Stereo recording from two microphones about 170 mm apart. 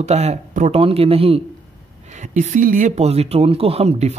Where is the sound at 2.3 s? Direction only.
45° right (ahead or behind).